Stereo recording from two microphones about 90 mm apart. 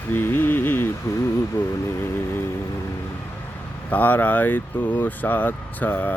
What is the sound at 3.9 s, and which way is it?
Speech, 20° left (ahead or behind).